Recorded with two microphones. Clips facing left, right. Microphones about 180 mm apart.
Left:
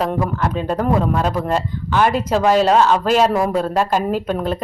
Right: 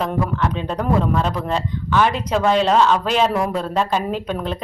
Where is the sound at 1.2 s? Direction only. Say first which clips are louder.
Left 3 dB; 45° left (ahead or behind).